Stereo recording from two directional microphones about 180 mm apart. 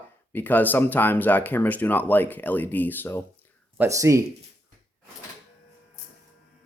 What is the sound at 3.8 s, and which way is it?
Speech, 15° right (ahead or behind).